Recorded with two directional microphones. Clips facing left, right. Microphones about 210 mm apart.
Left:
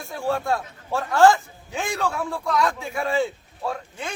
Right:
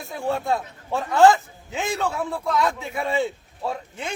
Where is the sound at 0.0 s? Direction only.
20° right (ahead or behind).